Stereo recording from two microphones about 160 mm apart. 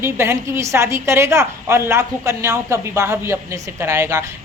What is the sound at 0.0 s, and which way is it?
A woman's voice, 15° right (ahead or behind).